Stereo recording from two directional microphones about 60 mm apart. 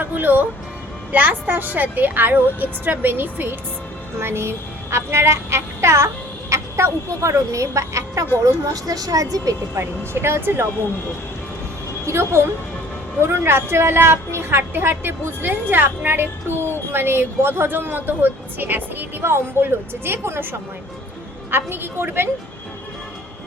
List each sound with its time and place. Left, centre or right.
0.0 s music: right
1.1 s a woman's voice: right
8.7 s a woman's voice: right
10.2 s a woman's voice: right
12.0 s a woman's voice: right